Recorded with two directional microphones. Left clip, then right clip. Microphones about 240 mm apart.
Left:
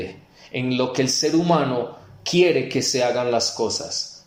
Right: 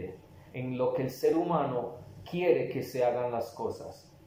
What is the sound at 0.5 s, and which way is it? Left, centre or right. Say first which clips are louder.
Speech: left 8 dB; left.